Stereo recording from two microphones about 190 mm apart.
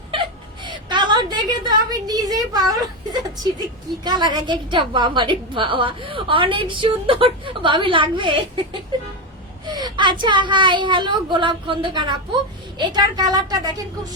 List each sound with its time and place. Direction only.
0.1 s a woman's voice: 25° right (ahead or behind)
9.6 s a woman's voice: 20° right (ahead or behind)